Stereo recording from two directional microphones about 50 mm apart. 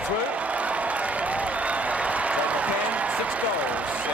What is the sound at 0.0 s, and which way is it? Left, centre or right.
Applause, right.